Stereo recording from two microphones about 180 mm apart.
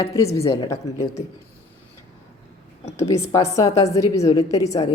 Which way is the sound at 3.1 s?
15° left (ahead or behind).